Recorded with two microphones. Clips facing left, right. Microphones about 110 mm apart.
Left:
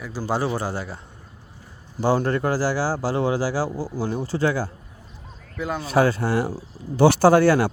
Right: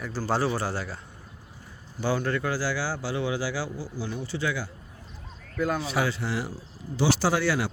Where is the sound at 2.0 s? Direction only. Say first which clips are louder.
Left 6 dB; 35° left (ahead or behind).